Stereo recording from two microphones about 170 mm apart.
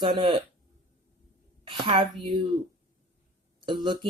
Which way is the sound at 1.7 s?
30° right (ahead or behind).